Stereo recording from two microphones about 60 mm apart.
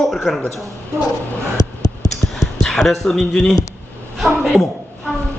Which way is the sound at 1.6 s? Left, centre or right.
Left.